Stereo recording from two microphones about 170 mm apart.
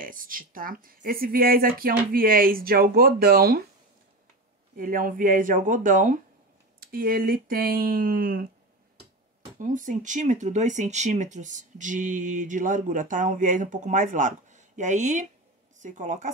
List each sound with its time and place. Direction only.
0.0 s speech: 55° right (ahead or behind)
4.7 s speech: 55° right (ahead or behind)
9.6 s speech: 50° right (ahead or behind)